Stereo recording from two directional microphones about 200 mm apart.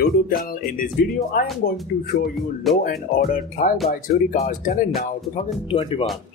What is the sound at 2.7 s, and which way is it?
Speech, centre (ahead or behind).